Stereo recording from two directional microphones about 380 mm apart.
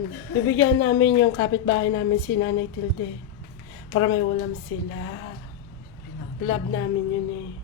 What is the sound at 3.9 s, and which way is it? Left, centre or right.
Speech, left.